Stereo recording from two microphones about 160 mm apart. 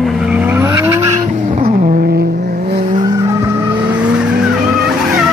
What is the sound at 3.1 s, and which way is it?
Vehicle, 20° right (ahead or behind).